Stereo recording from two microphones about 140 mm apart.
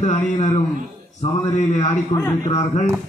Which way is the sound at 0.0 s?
55° left (ahead or behind).